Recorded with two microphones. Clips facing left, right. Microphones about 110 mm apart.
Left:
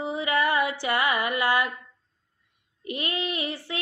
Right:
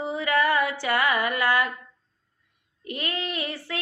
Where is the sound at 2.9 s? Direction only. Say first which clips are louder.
Left 1 dB; 20° left (ahead or behind).